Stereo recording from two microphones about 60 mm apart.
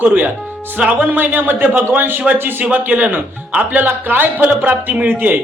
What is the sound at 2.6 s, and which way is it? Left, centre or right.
Speech, right.